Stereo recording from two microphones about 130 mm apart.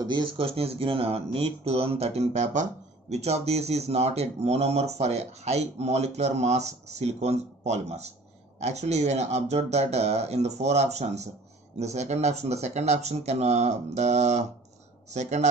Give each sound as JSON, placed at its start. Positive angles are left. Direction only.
{"t": 0.0, "sound": "speech", "side_deg": -35}